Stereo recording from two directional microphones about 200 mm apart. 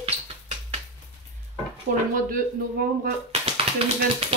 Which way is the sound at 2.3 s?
50° right (ahead or behind).